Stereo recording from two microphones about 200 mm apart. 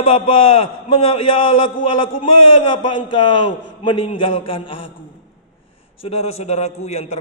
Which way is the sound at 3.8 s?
30° left (ahead or behind).